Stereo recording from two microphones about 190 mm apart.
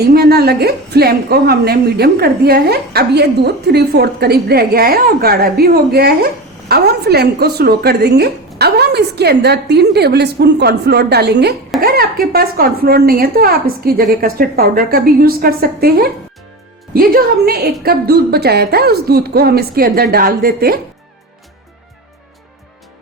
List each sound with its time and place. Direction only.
0.0 s a woman's voice: 55° right (ahead or behind)